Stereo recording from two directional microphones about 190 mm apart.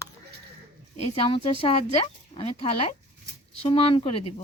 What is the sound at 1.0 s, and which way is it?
Speech, 30° left (ahead or behind).